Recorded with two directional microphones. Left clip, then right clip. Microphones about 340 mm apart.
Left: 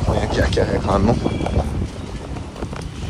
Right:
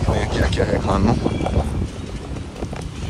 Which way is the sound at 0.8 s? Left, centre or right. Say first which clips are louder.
Left 2 dB; centre.